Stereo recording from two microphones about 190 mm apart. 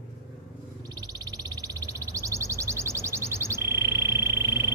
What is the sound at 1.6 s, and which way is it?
Bird, 15° right (ahead or behind).